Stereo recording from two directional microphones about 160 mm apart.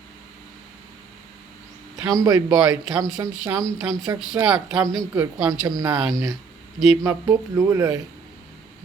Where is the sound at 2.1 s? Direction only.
20° right (ahead or behind).